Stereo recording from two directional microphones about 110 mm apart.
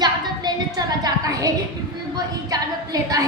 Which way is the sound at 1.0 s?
35° right (ahead or behind).